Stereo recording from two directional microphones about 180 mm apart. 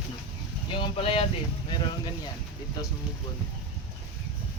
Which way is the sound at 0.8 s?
30° left (ahead or behind).